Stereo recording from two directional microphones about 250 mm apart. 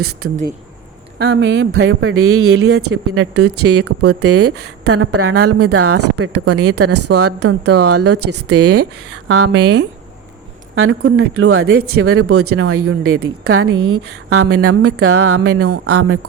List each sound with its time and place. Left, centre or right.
1.2 s speech: right